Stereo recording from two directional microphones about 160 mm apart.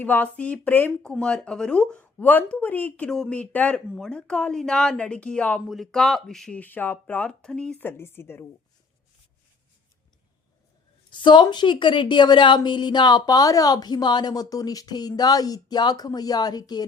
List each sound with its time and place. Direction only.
0.0 s speech: 10° left (ahead or behind)
11.2 s a woman's voice: 30° left (ahead or behind)